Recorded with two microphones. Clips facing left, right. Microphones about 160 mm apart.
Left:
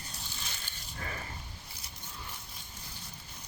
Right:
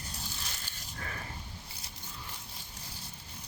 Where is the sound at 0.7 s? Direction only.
40° right (ahead or behind).